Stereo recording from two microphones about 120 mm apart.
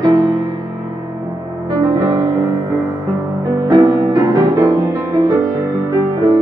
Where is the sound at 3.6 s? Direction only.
35° right (ahead or behind).